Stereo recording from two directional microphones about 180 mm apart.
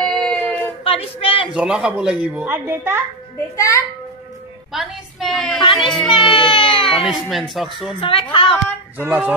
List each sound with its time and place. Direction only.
0.0 s a sound: 5° left (ahead or behind)
0.8 s speech: 30° left (ahead or behind)
1.5 s a woman's voice: 5° right (ahead or behind)
3.5 s a child's voice: 15° left (ahead or behind)
4.7 s a woman's voice: centre (ahead or behind)
6.0 s speech: 25° left (ahead or behind)
7.1 s a woman's voice: centre (ahead or behind)
8.0 s a woman's voice: 30° left (ahead or behind)
8.9 s a woman's voice: 10° right (ahead or behind)